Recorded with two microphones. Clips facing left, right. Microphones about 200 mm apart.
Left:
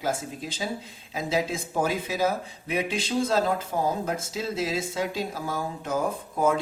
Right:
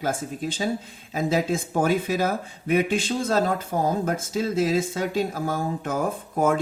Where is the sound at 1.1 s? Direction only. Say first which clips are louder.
Right 4 dB; 50° right (ahead or behind).